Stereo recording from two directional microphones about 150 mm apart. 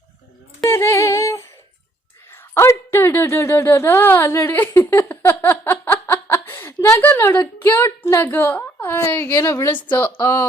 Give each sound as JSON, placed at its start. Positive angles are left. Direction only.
{"t": 0.7, "sound": "humming", "side_deg": 15}
{"t": 2.3, "sound": "speech", "side_deg": 15}